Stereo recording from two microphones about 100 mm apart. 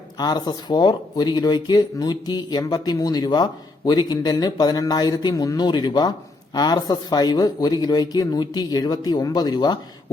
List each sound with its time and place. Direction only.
0.2 s speech: 45° left (ahead or behind)